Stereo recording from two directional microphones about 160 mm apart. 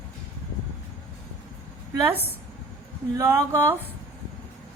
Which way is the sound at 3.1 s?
20° right (ahead or behind).